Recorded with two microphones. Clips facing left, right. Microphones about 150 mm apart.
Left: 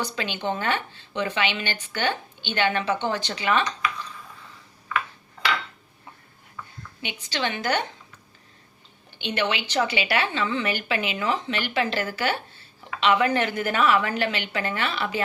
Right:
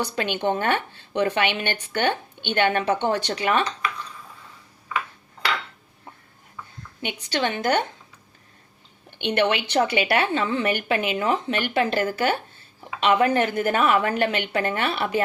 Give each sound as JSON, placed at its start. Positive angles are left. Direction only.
{"t": 0.4, "sound": "a woman's voice", "side_deg": -55}
{"t": 7.0, "sound": "a woman's voice", "side_deg": -50}
{"t": 9.0, "sound": "a woman's voice", "side_deg": -60}